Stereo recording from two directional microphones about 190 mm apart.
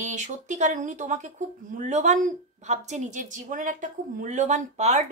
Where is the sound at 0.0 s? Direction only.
40° right (ahead or behind).